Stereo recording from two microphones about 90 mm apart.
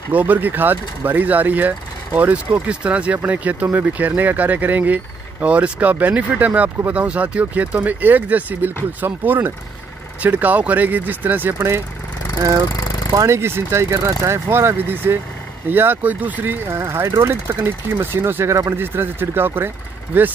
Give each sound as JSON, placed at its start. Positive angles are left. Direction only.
{"t": 0.1, "sound": "speech", "side_deg": -20}
{"t": 12.4, "sound": "speech", "side_deg": -40}